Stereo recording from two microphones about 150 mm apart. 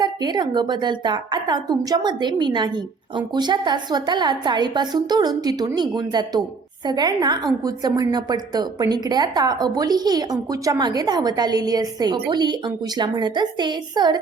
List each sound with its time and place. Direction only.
0.0 s a woman's voice: 30° right (ahead or behind)